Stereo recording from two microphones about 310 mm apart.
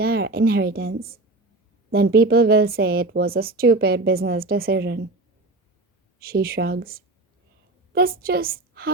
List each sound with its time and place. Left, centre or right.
0.0 s a woman's voice: right
6.1 s a woman's voice: right